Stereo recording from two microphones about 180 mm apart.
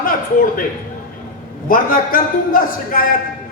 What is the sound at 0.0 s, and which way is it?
Speech, 50° left (ahead or behind).